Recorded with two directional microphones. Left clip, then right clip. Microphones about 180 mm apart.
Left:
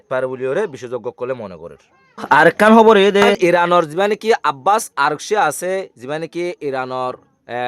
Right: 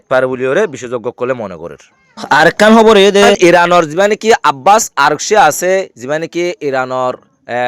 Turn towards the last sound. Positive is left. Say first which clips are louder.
# right 8 dB
turn(degrees=-20)  # may be behind; listen again after turning